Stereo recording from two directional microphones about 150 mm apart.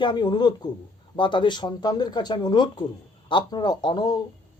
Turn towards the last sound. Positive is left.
turn(degrees=25)  # may be behind; listen again after turning